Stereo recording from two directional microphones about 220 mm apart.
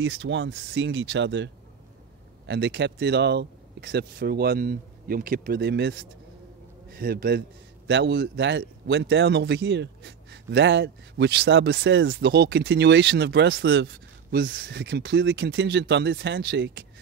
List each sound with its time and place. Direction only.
0.0 s a man's voice: 60° right (ahead or behind)